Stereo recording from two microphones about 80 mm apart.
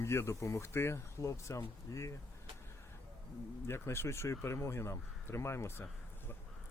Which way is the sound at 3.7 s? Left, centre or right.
Left.